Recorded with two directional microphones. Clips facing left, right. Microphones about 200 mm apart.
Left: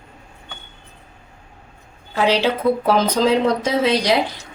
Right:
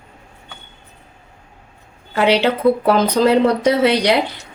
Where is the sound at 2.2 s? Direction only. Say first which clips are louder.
Right 3 dB; 60° right (ahead or behind).